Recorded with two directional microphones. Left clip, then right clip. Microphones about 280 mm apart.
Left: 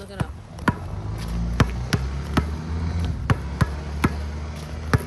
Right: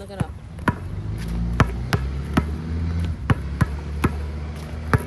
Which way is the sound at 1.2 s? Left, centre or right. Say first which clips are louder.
Right 2 dB; centre.